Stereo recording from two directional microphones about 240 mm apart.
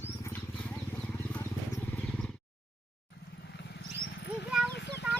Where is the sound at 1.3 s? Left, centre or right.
Centre.